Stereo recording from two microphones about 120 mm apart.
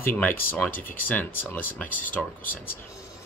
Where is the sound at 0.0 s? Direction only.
20° left (ahead or behind).